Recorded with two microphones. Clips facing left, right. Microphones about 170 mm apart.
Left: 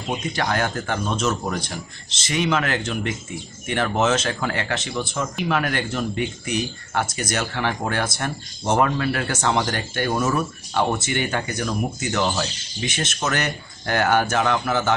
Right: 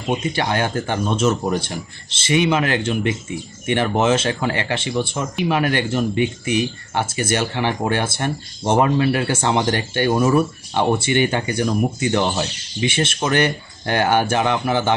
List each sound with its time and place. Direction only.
0.3 s speech: 25° right (ahead or behind)
3.9 s speech: 10° right (ahead or behind)
4.2 s speech: 20° right (ahead or behind)
5.9 s speech: 10° right (ahead or behind)
6.9 s speech: 25° right (ahead or behind)
10.2 s speech: 10° right (ahead or behind)
11.0 s speech: 30° right (ahead or behind)